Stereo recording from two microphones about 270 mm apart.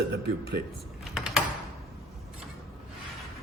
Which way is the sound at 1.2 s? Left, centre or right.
Centre.